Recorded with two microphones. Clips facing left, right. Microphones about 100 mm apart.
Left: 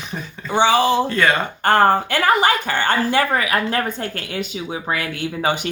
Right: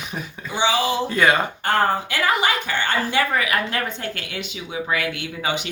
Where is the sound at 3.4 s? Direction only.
35° left (ahead or behind).